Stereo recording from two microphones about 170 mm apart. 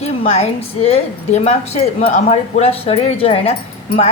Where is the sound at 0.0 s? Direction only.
35° left (ahead or behind).